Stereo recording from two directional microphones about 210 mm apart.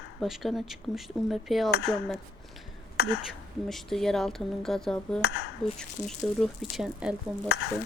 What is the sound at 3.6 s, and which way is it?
Speech, centre (ahead or behind).